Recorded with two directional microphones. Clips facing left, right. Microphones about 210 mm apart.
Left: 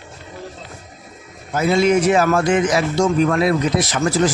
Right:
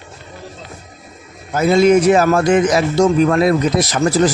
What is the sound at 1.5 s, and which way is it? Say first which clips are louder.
A man's voice: right 4 dB; 40° right (ahead or behind).